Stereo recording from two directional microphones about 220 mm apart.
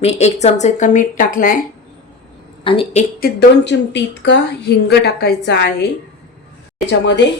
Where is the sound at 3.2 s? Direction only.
45° left (ahead or behind).